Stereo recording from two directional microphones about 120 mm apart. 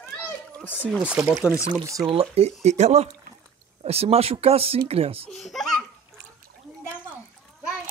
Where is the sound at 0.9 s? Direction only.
5° right (ahead or behind).